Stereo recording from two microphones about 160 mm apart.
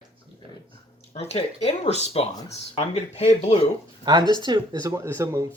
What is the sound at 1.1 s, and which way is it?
Speech, 40° left (ahead or behind).